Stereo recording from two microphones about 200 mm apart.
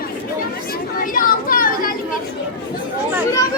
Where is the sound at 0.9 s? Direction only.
45° left (ahead or behind).